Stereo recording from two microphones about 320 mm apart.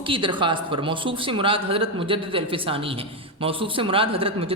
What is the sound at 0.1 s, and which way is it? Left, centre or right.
A man's voice, centre.